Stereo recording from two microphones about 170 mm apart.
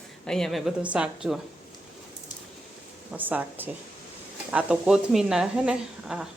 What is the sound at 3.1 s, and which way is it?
A woman's voice, 10° right (ahead or behind).